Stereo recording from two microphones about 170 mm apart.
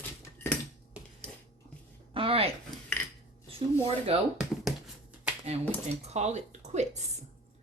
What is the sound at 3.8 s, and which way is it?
Speech, 35° right (ahead or behind).